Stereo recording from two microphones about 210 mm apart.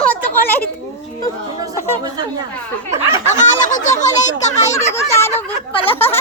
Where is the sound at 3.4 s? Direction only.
35° left (ahead or behind).